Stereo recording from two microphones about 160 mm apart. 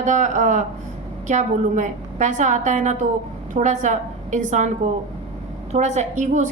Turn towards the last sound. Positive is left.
turn(degrees=-50)  # may be behind; listen again after turning